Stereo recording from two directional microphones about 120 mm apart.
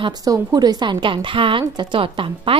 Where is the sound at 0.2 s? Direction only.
30° right (ahead or behind).